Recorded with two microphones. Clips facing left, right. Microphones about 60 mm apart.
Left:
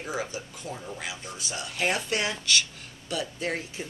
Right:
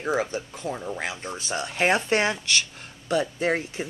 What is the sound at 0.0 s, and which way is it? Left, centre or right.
Speech, right.